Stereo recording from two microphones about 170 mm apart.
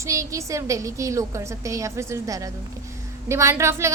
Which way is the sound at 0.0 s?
20° right (ahead or behind).